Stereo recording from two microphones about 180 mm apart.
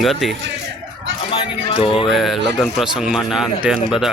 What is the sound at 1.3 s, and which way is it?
Speech, 30° left (ahead or behind).